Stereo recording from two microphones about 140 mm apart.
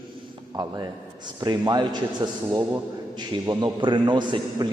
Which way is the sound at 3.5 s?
30° right (ahead or behind).